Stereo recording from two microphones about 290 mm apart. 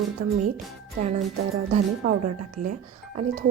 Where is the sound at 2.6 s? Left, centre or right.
Right.